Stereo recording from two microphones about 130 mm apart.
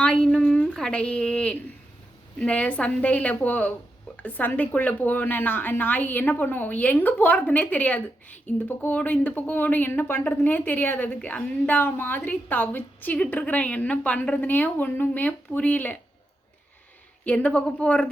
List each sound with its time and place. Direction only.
0.0 s a sound: 5° left (ahead or behind)
2.4 s speech: 10° left (ahead or behind)
17.2 s speech: 10° left (ahead or behind)